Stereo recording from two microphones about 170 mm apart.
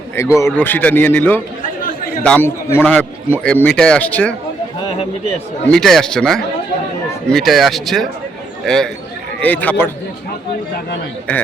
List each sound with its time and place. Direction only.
0.2 s a man's voice: 15° left (ahead or behind)
1.6 s chatter: 55° left (ahead or behind)
2.2 s a man's voice: 10° left (ahead or behind)
5.6 s a man's voice: 5° left (ahead or behind)